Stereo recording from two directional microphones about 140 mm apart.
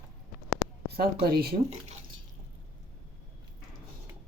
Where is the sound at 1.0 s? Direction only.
90° right.